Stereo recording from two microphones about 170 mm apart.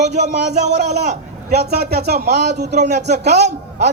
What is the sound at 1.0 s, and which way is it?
A man's voice, 65° right (ahead or behind).